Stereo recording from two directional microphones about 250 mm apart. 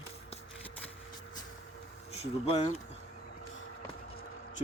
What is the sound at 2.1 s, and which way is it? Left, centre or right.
Speech, left.